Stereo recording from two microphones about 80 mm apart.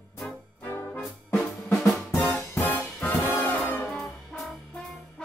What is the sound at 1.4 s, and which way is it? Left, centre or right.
Drum, centre.